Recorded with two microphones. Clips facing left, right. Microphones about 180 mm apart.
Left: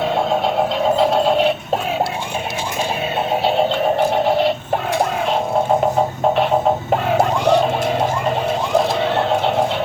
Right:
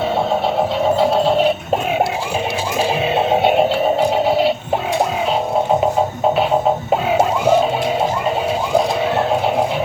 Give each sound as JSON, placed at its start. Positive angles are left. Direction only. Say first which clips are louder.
{"t": 0.9, "sound": "music", "louder": "even", "side_deg": 0}
{"t": 3.2, "sound": "music", "louder": "right 3 dB", "side_deg": -25}
{"t": 4.3, "sound": "synthetic singing", "louder": "right 1 dB", "side_deg": -10}
{"t": 6.9, "sound": "a sound", "louder": "right 2 dB", "side_deg": -5}
{"t": 8.7, "sound": "bird", "louder": "right 1 dB", "side_deg": -10}